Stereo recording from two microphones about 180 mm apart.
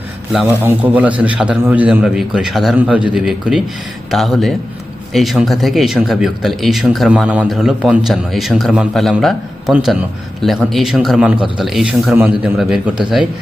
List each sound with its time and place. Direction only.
0.6 s a man's voice: 10° right (ahead or behind)